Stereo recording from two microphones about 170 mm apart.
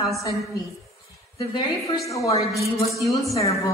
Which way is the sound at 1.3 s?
25° left (ahead or behind).